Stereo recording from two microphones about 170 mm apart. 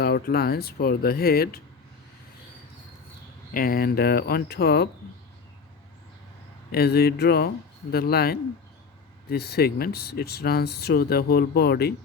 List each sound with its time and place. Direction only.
0.0 s speech: 65° left (ahead or behind)
3.5 s speech: 55° left (ahead or behind)
6.7 s speech: 70° left (ahead or behind)